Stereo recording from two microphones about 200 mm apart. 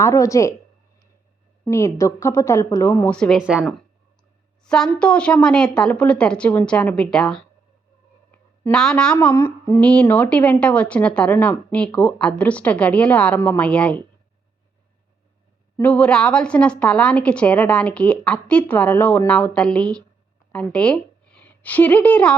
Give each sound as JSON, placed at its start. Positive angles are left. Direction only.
{"t": 0.0, "sound": "speech", "side_deg": 15}
{"t": 1.6, "sound": "a woman's voice", "side_deg": 15}
{"t": 15.8, "sound": "a woman's voice", "side_deg": 5}